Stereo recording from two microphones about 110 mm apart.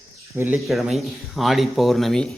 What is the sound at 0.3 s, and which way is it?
Speech, 15° right (ahead or behind).